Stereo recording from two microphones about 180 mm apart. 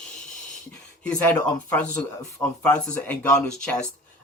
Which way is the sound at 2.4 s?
10° left (ahead or behind).